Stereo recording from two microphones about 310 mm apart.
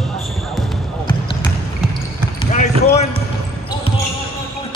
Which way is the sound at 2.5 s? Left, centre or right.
Left.